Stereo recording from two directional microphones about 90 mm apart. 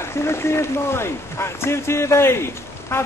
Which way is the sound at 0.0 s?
30° left (ahead or behind).